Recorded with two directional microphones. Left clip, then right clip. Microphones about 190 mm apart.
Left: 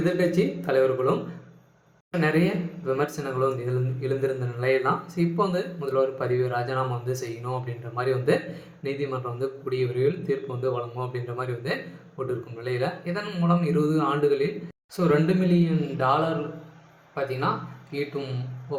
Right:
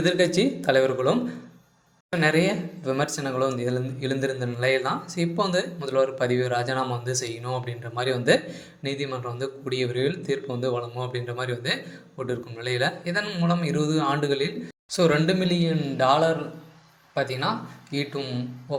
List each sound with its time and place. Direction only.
0.3 s speech: 35° right (ahead or behind)
2.1 s speech: 35° right (ahead or behind)